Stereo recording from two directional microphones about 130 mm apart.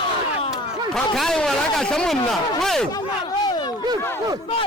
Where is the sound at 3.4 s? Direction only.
30° left (ahead or behind).